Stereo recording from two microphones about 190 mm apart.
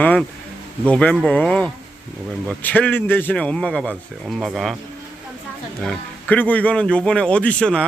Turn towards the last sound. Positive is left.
turn(degrees=5)  # may be behind; listen again after turning